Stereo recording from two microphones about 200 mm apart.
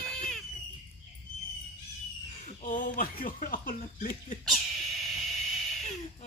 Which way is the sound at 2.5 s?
40° left (ahead or behind).